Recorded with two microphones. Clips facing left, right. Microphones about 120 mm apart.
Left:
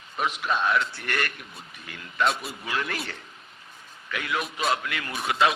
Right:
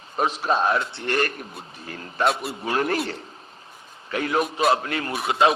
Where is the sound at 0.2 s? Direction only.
35° right (ahead or behind).